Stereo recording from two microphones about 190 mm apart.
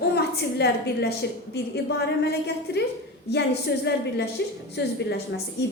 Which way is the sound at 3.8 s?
60° left (ahead or behind).